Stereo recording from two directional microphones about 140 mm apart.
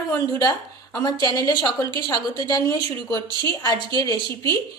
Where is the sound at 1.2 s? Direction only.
30° left (ahead or behind).